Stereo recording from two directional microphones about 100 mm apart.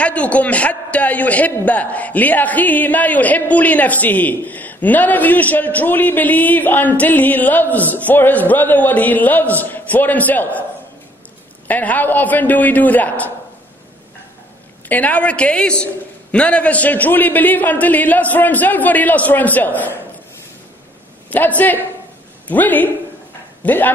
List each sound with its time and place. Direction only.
0.0 s a man's voice: 15° left (ahead or behind)
11.6 s a man's voice: 15° left (ahead or behind)
14.9 s a man's voice: 15° left (ahead or behind)
21.3 s a man's voice: 15° left (ahead or behind)